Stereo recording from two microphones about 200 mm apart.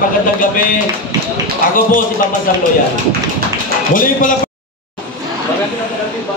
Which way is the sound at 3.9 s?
40° left (ahead or behind).